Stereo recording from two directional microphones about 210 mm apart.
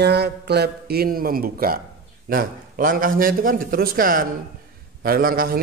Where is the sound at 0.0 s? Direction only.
50° right (ahead or behind).